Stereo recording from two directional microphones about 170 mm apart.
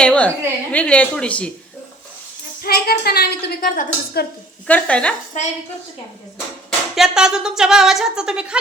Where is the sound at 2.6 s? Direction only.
65° left (ahead or behind).